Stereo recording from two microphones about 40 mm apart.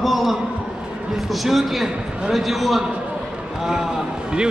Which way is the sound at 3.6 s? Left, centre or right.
Centre.